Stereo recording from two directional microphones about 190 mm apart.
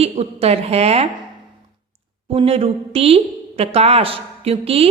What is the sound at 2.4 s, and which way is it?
A woman's voice, 30° right (ahead or behind).